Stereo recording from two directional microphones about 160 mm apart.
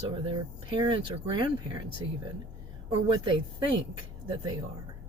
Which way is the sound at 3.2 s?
30° right (ahead or behind).